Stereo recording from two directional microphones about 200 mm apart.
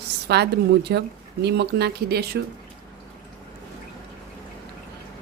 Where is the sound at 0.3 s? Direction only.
55° right (ahead or behind).